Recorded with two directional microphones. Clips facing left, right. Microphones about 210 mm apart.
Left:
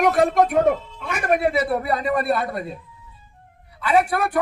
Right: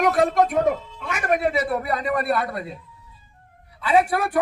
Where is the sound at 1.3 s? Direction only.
30° left (ahead or behind).